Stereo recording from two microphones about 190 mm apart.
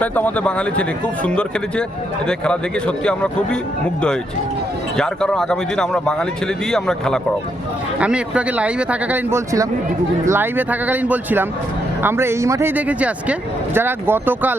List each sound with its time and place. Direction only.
0.0 s speech: 10° left (ahead or behind)
4.9 s speech: 5° left (ahead or behind)